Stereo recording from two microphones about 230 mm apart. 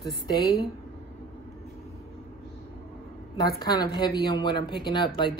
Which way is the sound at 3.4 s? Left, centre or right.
Centre.